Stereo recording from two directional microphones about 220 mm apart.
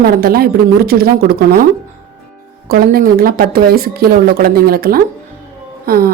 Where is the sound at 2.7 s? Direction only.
40° right (ahead or behind).